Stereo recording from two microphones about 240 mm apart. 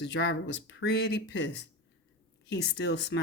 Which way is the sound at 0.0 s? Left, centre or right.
Left.